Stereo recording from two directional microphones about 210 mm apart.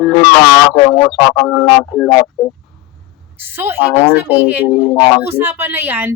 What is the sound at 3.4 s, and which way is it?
A woman's voice, 10° right (ahead or behind).